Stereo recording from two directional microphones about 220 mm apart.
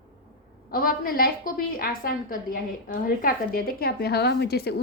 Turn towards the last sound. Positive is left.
turn(degrees=45)  # may be behind; listen again after turning